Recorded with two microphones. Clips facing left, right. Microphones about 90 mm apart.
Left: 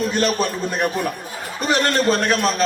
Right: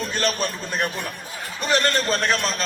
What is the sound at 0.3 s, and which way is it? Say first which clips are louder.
A man's voice: left 4 dB; 45° left (ahead or behind).